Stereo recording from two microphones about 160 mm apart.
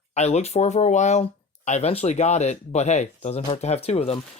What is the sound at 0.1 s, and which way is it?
Speech, 45° left (ahead or behind).